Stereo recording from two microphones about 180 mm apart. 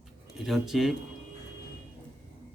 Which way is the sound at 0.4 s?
Centre (ahead or behind).